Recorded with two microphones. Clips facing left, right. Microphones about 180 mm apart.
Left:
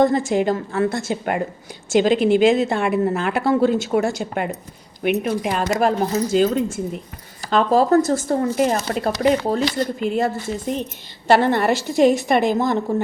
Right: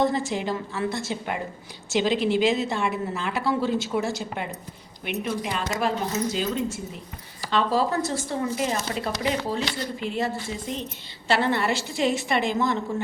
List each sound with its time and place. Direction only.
0.0 s a woman's voice: 50° left (ahead or behind)